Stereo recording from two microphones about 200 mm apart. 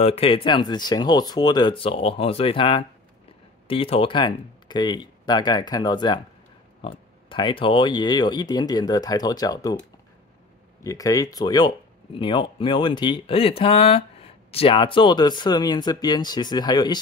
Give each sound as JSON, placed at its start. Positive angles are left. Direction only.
{"t": 0.0, "sound": "speech", "side_deg": 30}
{"t": 10.8, "sound": "speech", "side_deg": 15}